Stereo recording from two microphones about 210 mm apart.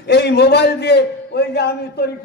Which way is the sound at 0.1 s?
50° left (ahead or behind).